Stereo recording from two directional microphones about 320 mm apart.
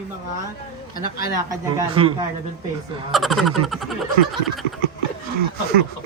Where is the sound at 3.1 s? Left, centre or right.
Centre.